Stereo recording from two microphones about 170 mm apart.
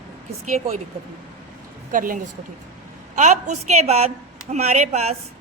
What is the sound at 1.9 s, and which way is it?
A woman's voice, 55° right (ahead or behind).